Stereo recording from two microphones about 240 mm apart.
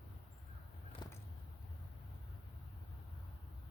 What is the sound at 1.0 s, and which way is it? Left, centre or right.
Vehicle, centre.